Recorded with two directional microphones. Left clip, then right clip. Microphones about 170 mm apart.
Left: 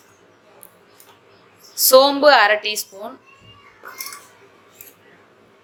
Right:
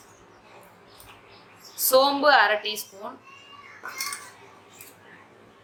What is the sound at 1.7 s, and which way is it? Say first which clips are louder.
A woman's voice: left 7 dB; 45° left (ahead or behind).